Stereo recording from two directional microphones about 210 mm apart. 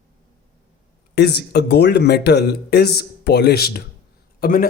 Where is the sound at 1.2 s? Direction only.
50° left (ahead or behind).